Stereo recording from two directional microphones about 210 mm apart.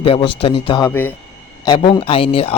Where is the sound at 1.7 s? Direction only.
30° left (ahead or behind).